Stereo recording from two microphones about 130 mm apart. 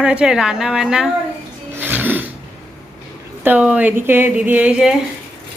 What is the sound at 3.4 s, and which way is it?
A woman's voice, 15° right (ahead or behind).